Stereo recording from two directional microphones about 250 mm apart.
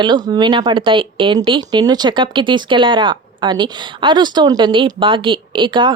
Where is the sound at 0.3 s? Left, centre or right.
Centre.